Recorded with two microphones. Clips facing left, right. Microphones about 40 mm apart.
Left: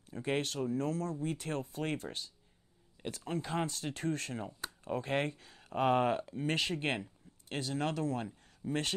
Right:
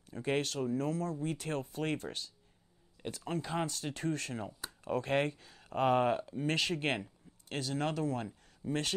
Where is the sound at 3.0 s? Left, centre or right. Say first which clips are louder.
Even; centre.